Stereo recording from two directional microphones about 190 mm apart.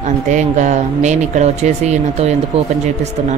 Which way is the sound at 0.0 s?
40° right (ahead or behind).